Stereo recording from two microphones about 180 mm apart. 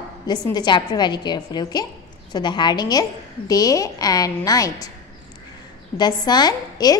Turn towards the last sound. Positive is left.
turn(degrees=20)  # may be behind; listen again after turning